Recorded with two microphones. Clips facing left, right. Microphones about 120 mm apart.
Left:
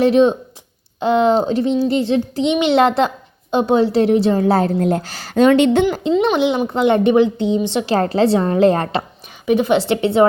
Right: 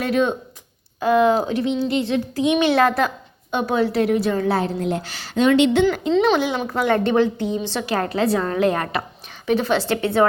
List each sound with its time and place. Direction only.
0.0 s a child's voice: 30° left (ahead or behind); by 5.8 s 45° left (ahead or behind)
6.3 s a child's voice: 20° left (ahead or behind)
7.4 s a woman's voice: 70° left (ahead or behind)
7.7 s a child's voice: 20° left (ahead or behind)
7.9 s a woman's voice: 35° left (ahead or behind)
9.5 s a woman's voice: 15° left (ahead or behind)